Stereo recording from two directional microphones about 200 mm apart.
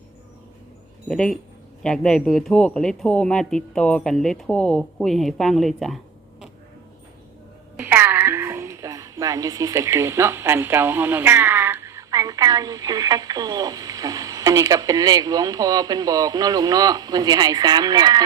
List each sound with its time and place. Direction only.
1.0 s speech: 5° left (ahead or behind)
7.8 s a woman's voice: 10° right (ahead or behind)